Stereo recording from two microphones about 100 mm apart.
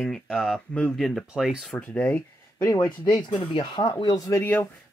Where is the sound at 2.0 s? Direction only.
20° left (ahead or behind).